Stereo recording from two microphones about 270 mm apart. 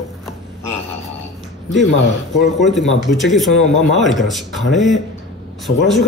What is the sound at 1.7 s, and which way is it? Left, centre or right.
Speech, left.